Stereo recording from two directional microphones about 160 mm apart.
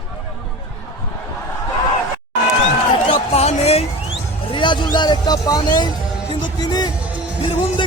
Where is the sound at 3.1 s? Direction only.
40° left (ahead or behind).